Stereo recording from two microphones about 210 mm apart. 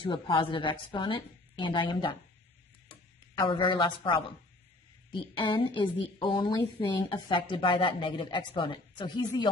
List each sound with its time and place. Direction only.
0.0 s speech: 25° left (ahead or behind)
3.3 s speech: 25° left (ahead or behind)